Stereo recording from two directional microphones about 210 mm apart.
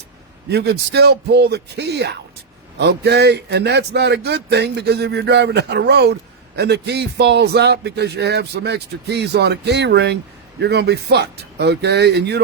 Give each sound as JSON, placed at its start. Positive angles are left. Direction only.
{"t": 0.5, "sound": "a man's voice", "side_deg": -50}